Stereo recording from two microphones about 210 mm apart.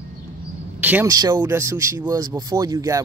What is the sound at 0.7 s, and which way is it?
Speech, 10° right (ahead or behind).